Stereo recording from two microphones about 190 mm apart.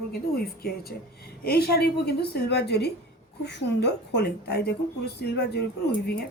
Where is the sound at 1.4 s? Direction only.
55° left (ahead or behind).